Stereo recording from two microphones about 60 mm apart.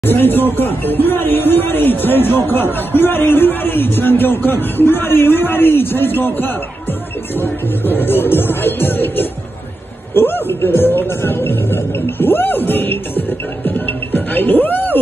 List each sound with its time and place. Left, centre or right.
0.0 s speech: left
13.7 s music: left